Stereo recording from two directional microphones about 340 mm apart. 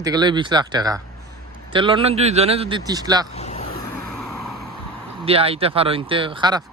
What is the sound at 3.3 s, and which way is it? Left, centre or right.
Vehicle, centre.